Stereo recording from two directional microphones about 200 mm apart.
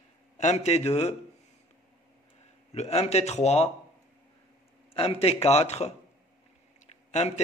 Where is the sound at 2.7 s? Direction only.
35° left (ahead or behind).